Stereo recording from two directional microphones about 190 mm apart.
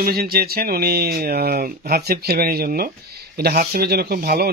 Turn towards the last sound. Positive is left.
turn(degrees=-55)  # may be behind; listen again after turning